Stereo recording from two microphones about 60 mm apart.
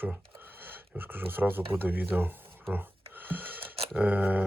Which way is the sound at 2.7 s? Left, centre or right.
Right.